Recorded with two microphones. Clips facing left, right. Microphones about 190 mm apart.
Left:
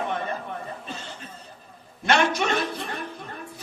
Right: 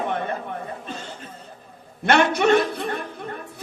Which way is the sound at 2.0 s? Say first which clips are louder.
Right 4 dB; 60° right (ahead or behind).